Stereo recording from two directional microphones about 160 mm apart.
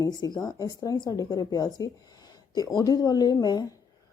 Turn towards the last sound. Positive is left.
turn(degrees=25)  # may be behind; listen again after turning